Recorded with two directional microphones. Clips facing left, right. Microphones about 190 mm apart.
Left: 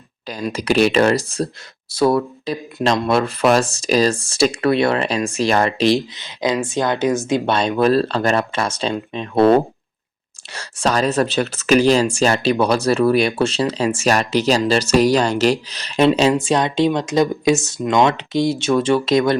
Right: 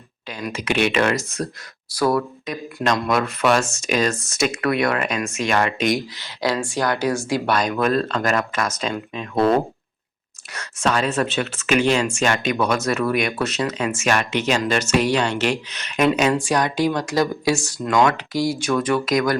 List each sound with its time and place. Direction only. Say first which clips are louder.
0.3 s speech: left 5 dB; 35° left (ahead or behind)
6.1 s speech: left 3 dB; 20° left (ahead or behind)